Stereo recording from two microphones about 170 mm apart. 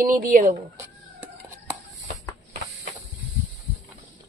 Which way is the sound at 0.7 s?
15° right (ahead or behind).